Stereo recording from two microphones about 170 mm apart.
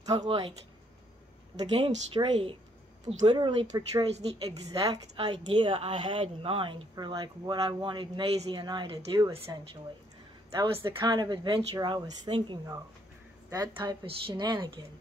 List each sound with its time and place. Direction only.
0.0 s speech: 25° right (ahead or behind)
2.1 s speech: 25° right (ahead or behind)